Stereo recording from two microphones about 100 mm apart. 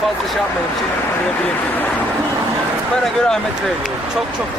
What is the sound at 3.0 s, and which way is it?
Speech, 5° left (ahead or behind).